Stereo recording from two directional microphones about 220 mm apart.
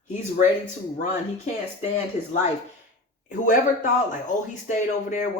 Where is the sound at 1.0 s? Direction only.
35° left (ahead or behind).